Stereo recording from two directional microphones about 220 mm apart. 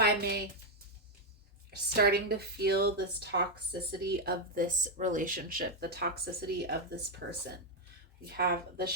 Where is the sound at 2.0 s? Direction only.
45° right (ahead or behind).